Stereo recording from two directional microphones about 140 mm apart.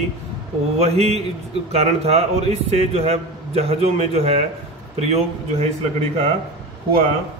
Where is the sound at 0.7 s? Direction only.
50° right (ahead or behind).